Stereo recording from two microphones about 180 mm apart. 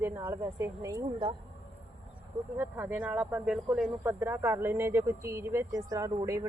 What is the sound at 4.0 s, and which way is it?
Speech, 15° right (ahead or behind).